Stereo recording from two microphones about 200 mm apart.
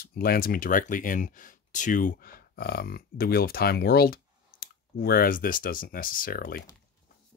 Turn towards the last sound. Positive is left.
turn(degrees=45)  # may be behind; listen again after turning